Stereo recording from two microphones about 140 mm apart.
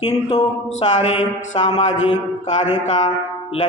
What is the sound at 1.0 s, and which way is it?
Mantra, 50° left (ahead or behind).